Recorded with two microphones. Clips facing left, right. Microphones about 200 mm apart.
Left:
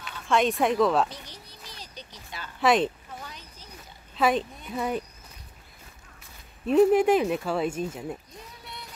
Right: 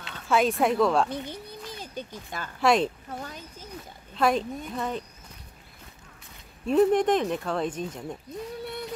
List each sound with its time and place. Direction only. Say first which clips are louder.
0.3 s speech: even; centre (ahead or behind)
1.1 s speech: right 10 dB; 55° right (ahead or behind)
2.6 s speech: even; centre (ahead or behind)
3.1 s speech: right 5 dB; 50° right (ahead or behind)
4.2 s speech: even; centre (ahead or behind)
6.7 s speech: left 2 dB; 5° left (ahead or behind)